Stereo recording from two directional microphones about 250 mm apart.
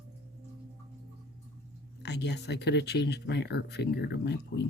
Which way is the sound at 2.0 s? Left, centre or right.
Left.